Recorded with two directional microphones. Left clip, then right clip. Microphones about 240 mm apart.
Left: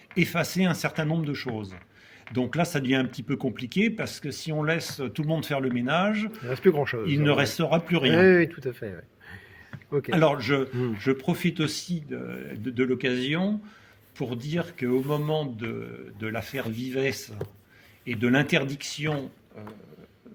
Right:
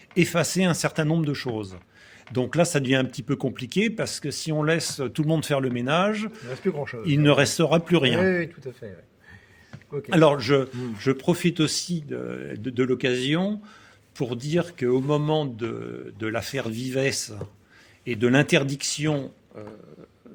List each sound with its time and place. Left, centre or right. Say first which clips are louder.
0.1 s speech: right 4 dB; right
6.5 s speech: left 6 dB; left
7.0 s speech: right 7 dB; right
8.2 s speech: left 5 dB; left
10.1 s speech: right 5 dB; right